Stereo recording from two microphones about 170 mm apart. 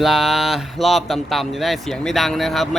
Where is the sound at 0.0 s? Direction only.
Centre (ahead or behind).